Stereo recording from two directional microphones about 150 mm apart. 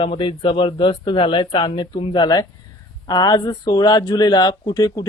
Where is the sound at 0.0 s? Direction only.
35° left (ahead or behind).